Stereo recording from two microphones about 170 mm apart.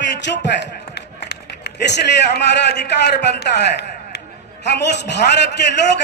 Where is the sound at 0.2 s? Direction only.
90° left.